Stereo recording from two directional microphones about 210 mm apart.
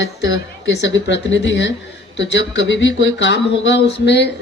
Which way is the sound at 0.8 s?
60° left (ahead or behind).